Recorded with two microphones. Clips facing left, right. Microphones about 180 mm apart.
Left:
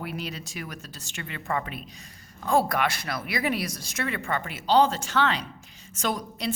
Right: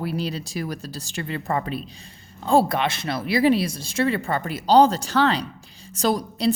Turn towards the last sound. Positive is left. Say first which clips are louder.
# right 8 dB
turn(degrees=-35)  # may be behind; listen again after turning